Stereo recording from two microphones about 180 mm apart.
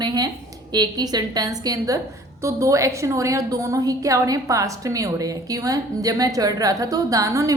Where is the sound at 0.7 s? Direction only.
20° right (ahead or behind).